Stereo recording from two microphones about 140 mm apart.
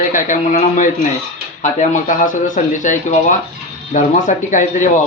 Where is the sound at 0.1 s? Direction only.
65° left (ahead or behind).